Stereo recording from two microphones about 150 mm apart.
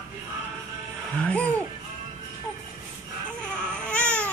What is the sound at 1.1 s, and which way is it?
Music, 5° left (ahead or behind).